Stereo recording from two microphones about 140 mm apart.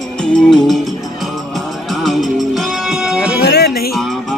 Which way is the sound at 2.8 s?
5° right (ahead or behind).